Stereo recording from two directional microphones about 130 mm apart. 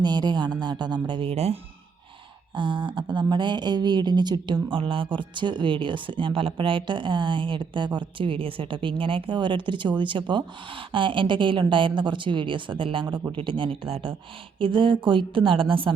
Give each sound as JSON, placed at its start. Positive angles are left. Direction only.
{"t": 0.0, "sound": "speech", "side_deg": -35}
{"t": 1.3, "sound": "speech", "side_deg": -50}
{"t": 2.6, "sound": "speech", "side_deg": -40}